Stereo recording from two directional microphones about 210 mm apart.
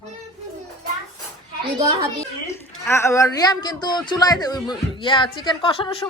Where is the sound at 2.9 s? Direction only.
15° left (ahead or behind).